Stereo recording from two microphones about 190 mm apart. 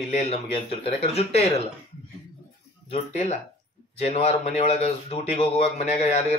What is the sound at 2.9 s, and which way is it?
Speech, 35° left (ahead or behind).